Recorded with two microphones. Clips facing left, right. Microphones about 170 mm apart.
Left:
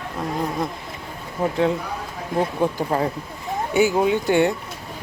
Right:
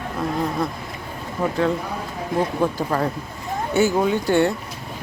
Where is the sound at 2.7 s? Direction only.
15° left (ahead or behind).